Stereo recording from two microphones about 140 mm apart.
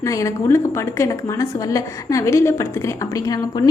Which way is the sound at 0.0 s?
20° left (ahead or behind).